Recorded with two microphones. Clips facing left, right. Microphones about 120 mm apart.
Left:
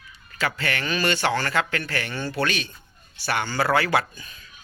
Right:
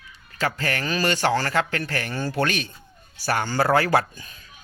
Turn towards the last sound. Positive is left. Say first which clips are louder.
# right 2 dB
turn(degrees=-35)  # may be behind; listen again after turning